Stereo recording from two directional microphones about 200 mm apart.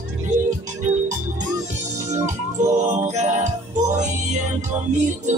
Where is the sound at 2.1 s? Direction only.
35° right (ahead or behind).